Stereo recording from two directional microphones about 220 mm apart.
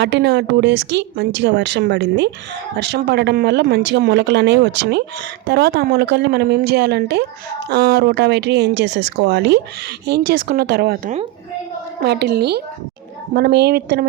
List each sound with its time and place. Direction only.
0.0 s speech: 50° right (ahead or behind)